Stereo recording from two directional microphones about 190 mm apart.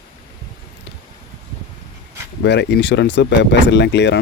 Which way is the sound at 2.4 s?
65° left (ahead or behind).